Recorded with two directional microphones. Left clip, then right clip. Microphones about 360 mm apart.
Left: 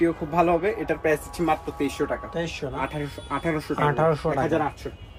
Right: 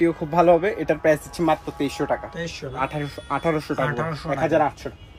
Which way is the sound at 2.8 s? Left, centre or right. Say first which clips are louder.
Right 6 dB; right.